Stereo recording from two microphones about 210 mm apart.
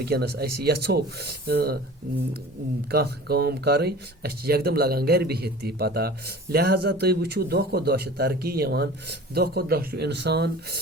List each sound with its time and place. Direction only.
0.0 s speech: 50° right (ahead or behind)
2.9 s speech: 50° right (ahead or behind)